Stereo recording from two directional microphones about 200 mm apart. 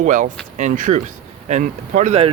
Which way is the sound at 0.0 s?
40° right (ahead or behind).